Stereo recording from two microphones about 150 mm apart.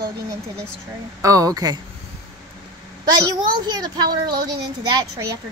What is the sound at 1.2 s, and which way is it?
Speech, 20° right (ahead or behind).